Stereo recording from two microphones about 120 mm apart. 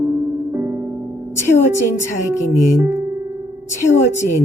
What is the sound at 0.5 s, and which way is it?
Music, 20° right (ahead or behind).